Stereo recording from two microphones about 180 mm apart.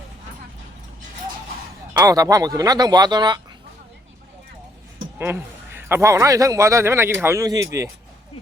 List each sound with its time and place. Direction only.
1.9 s speech: 20° right (ahead or behind)
5.1 s a man's voice: 10° right (ahead or behind)